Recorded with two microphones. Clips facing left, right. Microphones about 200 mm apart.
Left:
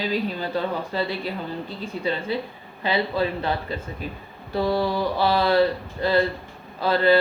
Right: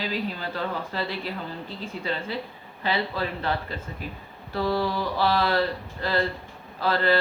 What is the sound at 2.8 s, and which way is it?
Speech, 15° left (ahead or behind).